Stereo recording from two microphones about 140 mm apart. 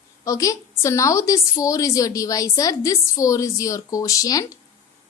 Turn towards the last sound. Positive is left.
turn(degrees=25)  # may be behind; listen again after turning